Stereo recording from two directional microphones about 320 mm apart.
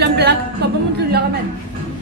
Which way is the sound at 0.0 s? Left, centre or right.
Right.